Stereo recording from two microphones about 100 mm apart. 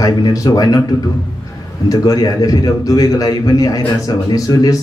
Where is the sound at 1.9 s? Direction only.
40° left (ahead or behind).